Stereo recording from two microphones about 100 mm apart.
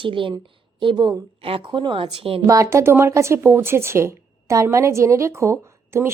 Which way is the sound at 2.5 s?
30° right (ahead or behind).